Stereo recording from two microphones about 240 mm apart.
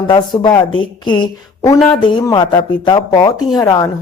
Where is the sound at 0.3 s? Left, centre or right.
Centre.